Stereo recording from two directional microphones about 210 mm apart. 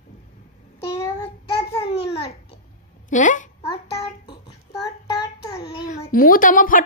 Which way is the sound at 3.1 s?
35° left (ahead or behind).